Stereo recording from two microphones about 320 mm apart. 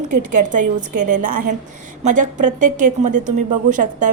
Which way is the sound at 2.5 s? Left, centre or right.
Right.